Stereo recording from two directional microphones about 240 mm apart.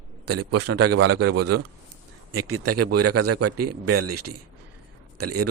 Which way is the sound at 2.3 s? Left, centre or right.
Right.